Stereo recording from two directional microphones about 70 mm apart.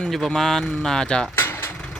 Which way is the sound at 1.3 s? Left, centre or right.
Left.